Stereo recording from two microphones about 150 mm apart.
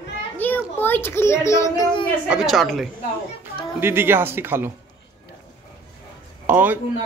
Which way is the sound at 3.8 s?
15° right (ahead or behind).